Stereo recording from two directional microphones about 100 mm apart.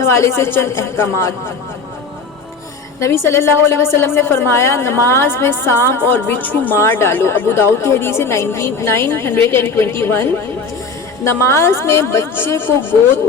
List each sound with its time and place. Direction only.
0.0 s a woman's voice: 25° left (ahead or behind)
3.2 s a woman's voice: 25° left (ahead or behind)